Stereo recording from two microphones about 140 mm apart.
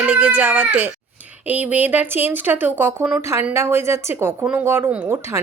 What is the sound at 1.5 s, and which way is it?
Speech, 10° right (ahead or behind).